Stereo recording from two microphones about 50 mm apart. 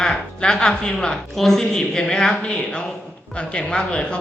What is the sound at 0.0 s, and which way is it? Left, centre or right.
Speech, centre.